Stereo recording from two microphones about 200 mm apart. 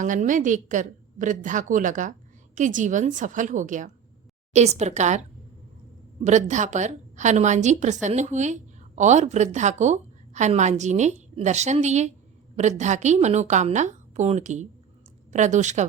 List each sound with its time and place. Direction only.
0.0 s a woman's voice: 40° right (ahead or behind)
6.2 s a woman's voice: 35° right (ahead or behind)